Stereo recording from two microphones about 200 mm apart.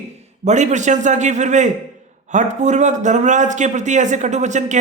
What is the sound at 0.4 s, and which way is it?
A man's voice, 35° right (ahead or behind).